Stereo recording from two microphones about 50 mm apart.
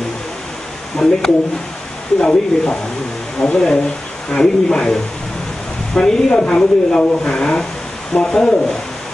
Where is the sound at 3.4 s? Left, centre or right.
Centre.